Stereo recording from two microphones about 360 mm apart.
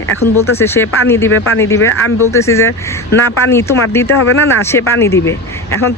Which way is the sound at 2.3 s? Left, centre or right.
Centre.